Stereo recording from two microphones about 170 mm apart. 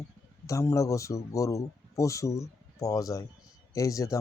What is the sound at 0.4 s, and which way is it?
Speech, 15° left (ahead or behind).